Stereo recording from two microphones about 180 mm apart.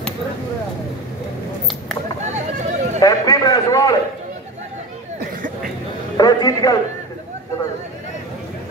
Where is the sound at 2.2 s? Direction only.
40° right (ahead or behind).